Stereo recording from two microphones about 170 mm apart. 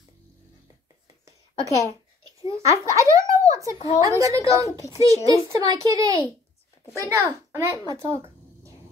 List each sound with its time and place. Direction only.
2.5 s a child's voice: 20° right (ahead or behind)
3.7 s a woman's voice: 25° left (ahead or behind)
4.0 s a child's voice: 20° right (ahead or behind)